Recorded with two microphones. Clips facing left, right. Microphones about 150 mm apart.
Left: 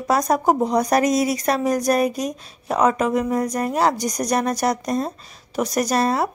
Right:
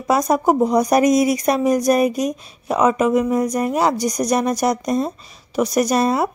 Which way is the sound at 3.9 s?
40° left (ahead or behind).